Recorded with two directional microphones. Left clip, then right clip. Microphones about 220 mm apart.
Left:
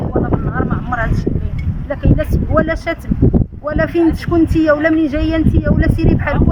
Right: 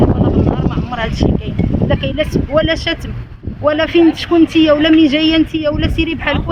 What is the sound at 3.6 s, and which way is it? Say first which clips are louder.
A man's voice: right 5 dB; 15° right (ahead or behind).